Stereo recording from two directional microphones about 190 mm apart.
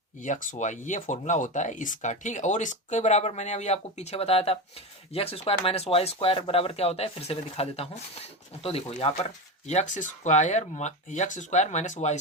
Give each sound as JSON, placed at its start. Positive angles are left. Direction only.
{"t": 0.2, "sound": "speech", "side_deg": 40}